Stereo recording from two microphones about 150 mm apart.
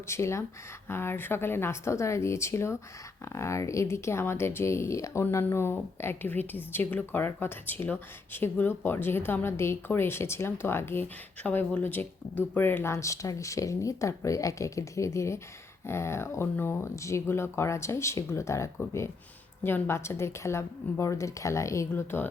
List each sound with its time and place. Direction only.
0.1 s speech: 20° left (ahead or behind)